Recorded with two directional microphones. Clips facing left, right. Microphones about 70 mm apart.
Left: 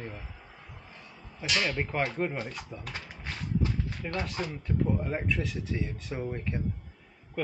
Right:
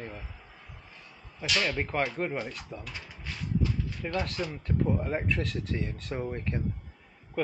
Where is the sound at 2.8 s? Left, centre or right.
Left.